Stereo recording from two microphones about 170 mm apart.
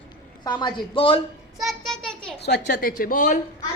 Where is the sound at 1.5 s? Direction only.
Centre (ahead or behind).